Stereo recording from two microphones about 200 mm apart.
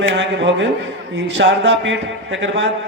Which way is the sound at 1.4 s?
60° right (ahead or behind).